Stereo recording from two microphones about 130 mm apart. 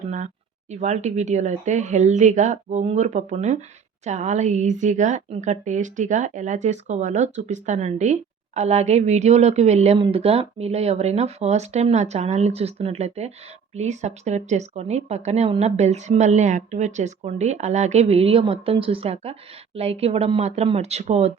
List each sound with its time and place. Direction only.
0.7 s a woman's voice: 60° right (ahead or behind)